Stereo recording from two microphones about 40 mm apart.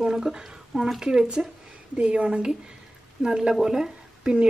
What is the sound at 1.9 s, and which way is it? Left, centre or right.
Speech, right.